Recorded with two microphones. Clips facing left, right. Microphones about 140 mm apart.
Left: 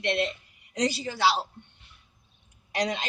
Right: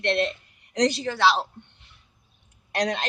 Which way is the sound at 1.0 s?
65° right (ahead or behind).